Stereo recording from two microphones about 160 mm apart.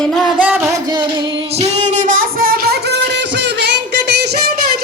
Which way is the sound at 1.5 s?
45° right (ahead or behind).